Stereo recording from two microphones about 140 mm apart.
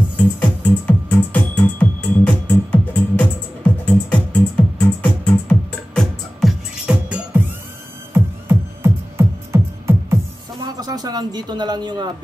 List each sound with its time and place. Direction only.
0.4 s music: 10° left (ahead or behind)
6.9 s music: 10° right (ahead or behind)
10.8 s a sound: 30° right (ahead or behind)